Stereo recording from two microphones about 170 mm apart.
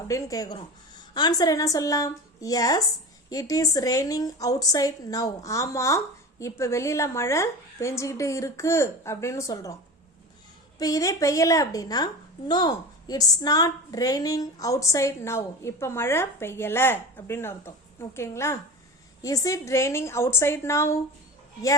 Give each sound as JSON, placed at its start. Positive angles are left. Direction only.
{"t": 0.1, "sound": "a woman's voice", "side_deg": 20}
{"t": 10.8, "sound": "a woman's voice", "side_deg": 20}